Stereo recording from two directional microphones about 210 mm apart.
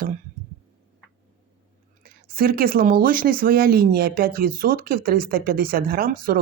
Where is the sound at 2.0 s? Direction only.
45° right (ahead or behind).